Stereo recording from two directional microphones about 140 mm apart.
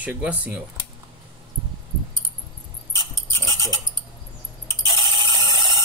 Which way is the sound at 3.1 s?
20° left (ahead or behind).